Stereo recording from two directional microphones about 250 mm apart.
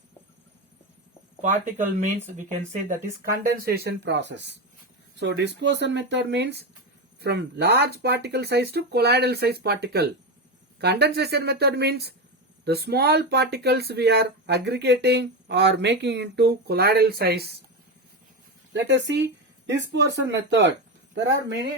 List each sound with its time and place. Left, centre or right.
1.4 s speech: right
18.7 s speech: right